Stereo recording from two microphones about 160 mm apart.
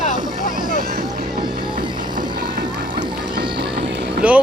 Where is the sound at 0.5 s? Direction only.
70° right (ahead or behind).